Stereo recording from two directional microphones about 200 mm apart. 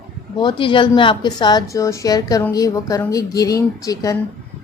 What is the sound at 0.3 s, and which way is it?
A woman's voice, 25° left (ahead or behind).